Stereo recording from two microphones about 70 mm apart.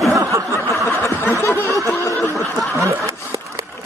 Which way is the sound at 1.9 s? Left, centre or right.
Left.